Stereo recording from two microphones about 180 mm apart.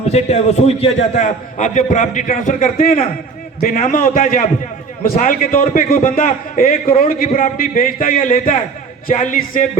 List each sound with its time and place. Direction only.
0.1 s a man's voice: 35° left (ahead or behind)